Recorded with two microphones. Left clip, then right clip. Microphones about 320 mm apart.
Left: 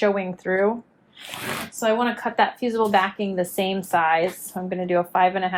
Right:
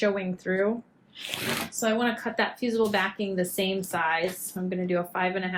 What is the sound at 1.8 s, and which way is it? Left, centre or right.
A woman's voice, centre.